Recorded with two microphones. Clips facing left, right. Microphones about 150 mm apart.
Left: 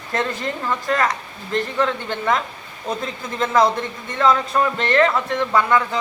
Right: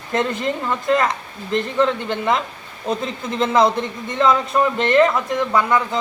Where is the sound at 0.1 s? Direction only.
20° right (ahead or behind).